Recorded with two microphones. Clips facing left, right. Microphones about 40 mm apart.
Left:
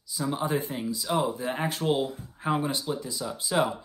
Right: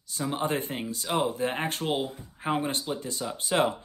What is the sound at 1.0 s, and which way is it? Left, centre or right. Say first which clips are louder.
Speech: even; right.